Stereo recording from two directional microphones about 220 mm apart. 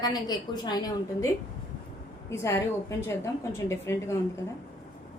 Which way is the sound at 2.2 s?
10° left (ahead or behind).